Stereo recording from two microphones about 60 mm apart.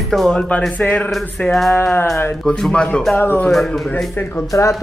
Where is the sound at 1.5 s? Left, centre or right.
Centre.